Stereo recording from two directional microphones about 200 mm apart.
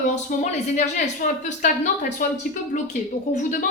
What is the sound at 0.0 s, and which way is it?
Speech, 35° left (ahead or behind).